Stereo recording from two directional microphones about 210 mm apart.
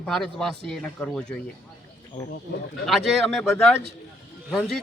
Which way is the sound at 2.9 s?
Centre (ahead or behind).